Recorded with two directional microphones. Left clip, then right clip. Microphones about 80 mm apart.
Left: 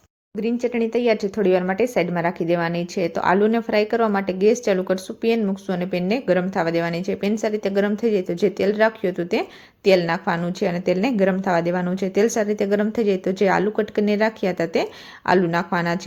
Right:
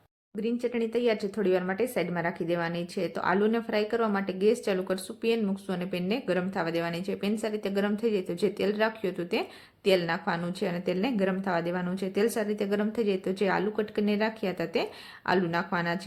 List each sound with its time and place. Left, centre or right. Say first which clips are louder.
0.4 s a woman's voice: left 7 dB; left